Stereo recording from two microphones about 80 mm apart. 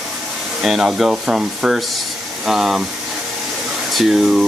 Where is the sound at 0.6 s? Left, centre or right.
Centre.